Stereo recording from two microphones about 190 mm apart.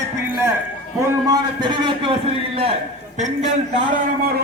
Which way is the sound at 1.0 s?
20° right (ahead or behind).